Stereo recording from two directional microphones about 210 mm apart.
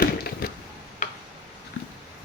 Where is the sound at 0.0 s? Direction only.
45° left (ahead or behind).